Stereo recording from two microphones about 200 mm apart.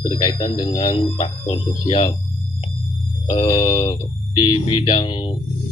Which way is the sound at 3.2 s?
25° left (ahead or behind).